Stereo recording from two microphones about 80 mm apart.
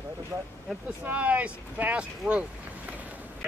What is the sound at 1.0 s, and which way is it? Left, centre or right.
Speech, centre.